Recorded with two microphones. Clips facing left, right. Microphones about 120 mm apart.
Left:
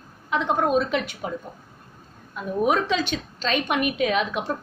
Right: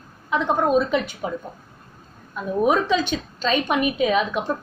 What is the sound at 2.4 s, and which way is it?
A woman's voice, 30° right (ahead or behind).